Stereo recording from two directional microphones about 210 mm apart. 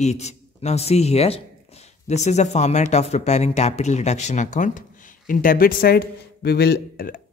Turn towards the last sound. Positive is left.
turn(degrees=40)  # may be behind; listen again after turning